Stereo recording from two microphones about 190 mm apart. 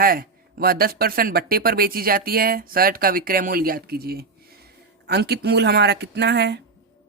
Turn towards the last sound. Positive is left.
turn(degrees=-60)  # may be behind; listen again after turning